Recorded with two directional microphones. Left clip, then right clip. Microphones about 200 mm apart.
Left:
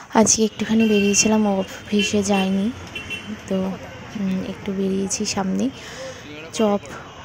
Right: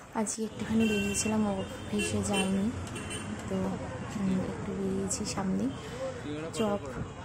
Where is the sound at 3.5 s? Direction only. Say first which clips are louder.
Left 11 dB; 30° left (ahead or behind).